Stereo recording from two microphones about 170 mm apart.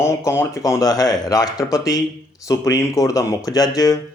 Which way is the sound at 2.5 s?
20° left (ahead or behind).